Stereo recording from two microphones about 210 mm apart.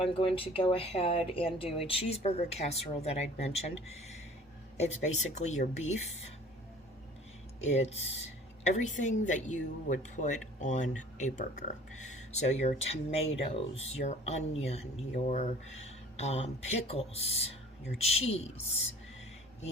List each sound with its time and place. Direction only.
0.0 s speech: 25° left (ahead or behind)
7.6 s speech: 30° left (ahead or behind)